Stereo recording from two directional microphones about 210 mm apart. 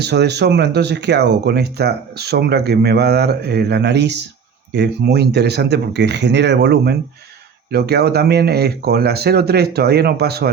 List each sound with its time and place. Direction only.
0.0 s speech: 50° right (ahead or behind)